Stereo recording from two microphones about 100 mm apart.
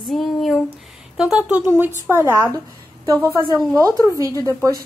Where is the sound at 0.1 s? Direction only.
Centre (ahead or behind).